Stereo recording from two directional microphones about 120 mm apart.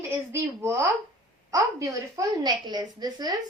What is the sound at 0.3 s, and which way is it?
A woman's voice, 20° right (ahead or behind).